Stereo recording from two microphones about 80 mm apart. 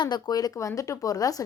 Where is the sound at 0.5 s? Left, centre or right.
Left.